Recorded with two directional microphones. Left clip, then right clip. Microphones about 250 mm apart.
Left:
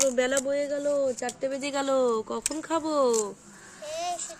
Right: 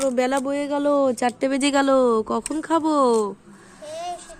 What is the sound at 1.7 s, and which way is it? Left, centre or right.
Speech, right.